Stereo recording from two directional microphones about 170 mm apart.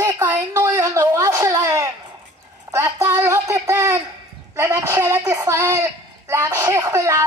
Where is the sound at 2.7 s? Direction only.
20° right (ahead or behind).